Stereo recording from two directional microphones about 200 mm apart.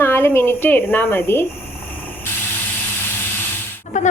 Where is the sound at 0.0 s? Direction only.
10° left (ahead or behind).